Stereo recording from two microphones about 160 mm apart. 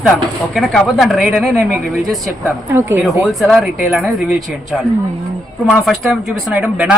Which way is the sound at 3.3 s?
Centre (ahead or behind).